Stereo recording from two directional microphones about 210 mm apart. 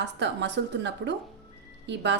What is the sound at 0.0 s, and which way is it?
Speech, 55° right (ahead or behind).